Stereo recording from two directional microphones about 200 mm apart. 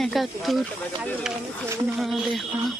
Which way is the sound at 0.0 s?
Centre (ahead or behind).